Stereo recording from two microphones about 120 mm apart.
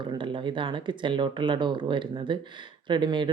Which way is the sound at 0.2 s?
45° right (ahead or behind).